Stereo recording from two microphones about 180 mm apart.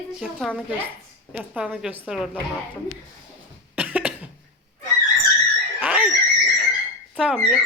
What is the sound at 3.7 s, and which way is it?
Cough, 5° right (ahead or behind).